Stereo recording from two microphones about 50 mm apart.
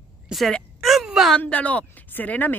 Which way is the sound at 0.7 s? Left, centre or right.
Centre.